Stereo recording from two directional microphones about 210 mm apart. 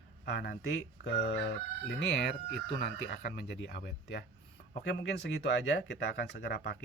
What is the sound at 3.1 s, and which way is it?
Speech, 55° left (ahead or behind).